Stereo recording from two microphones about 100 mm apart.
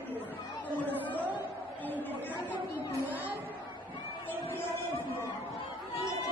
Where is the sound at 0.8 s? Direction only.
15° left (ahead or behind).